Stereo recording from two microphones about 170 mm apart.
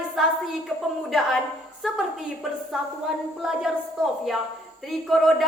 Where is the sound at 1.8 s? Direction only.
Centre (ahead or behind).